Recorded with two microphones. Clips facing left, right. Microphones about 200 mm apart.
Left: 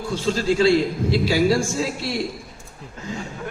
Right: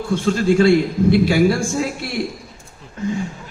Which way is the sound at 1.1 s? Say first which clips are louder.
Right 4 dB; 55° right (ahead or behind).